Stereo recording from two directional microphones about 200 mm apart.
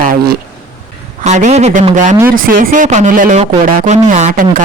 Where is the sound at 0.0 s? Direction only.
45° right (ahead or behind).